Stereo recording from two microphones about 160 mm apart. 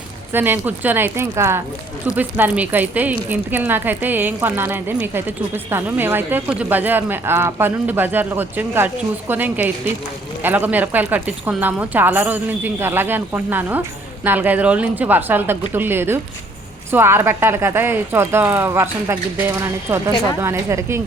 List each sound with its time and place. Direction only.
0.3 s speech: 10° right (ahead or behind)